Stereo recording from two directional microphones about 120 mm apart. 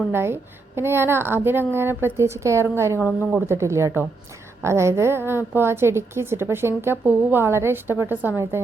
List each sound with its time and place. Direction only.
0.1 s a woman's voice: 20° right (ahead or behind)